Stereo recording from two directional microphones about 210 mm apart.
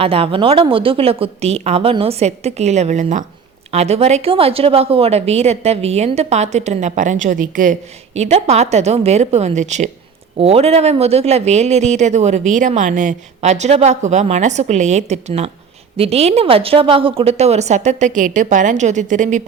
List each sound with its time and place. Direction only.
0.0 s a woman's voice: 25° right (ahead or behind)